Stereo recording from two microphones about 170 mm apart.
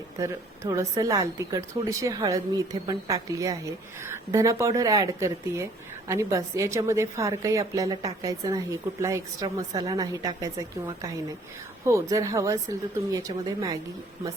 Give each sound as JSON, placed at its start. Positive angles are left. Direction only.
{"t": 0.2, "sound": "a woman's voice", "side_deg": -20}